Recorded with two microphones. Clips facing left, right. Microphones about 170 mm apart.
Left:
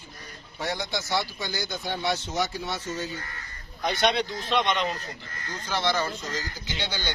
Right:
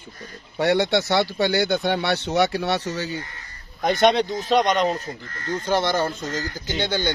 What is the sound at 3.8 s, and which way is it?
Speech, 50° right (ahead or behind).